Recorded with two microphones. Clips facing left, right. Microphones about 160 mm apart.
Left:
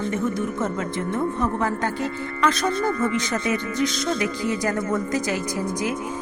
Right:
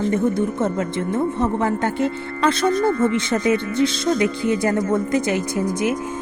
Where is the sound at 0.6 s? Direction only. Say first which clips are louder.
Right 4 dB; 25° right (ahead or behind).